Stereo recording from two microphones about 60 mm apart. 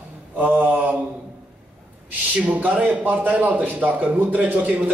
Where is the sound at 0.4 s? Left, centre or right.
Right.